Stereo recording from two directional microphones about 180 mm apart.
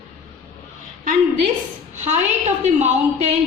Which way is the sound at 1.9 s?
40° right (ahead or behind).